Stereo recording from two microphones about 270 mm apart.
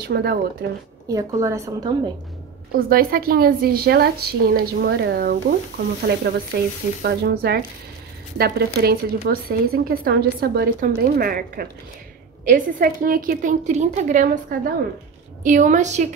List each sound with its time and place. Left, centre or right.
0.1 s a woman's voice: right
1.0 s a woman's voice: centre
2.7 s a woman's voice: right